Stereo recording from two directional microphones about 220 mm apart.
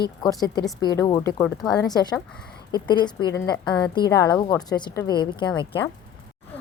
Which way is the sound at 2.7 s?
20° left (ahead or behind).